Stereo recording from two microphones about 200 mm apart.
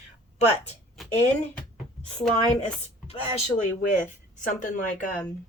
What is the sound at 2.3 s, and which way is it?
Speech, 35° left (ahead or behind).